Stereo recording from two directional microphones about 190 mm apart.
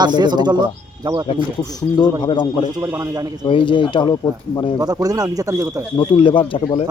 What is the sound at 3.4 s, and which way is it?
Speech, 25° left (ahead or behind).